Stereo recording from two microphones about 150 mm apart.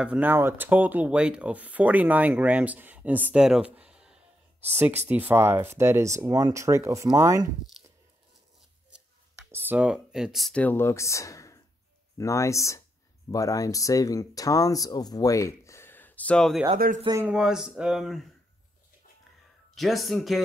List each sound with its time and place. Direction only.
0.0 s speech: 10° right (ahead or behind)
9.5 s speech: 15° right (ahead or behind); by 16.6 s 5° left (ahead or behind)
16.7 s speech: 65° right (ahead or behind)
17.3 s speech: 5° right (ahead or behind)
19.7 s speech: centre (ahead or behind)